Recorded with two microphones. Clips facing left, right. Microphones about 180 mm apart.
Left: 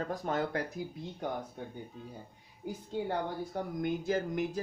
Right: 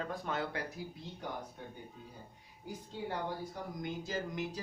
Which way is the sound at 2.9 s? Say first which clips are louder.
Left 5 dB; 55° left (ahead or behind).